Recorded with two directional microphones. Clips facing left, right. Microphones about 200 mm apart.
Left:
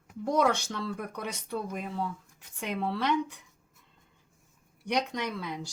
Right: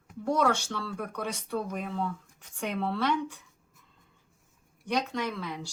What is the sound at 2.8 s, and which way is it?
Speech, 10° left (ahead or behind).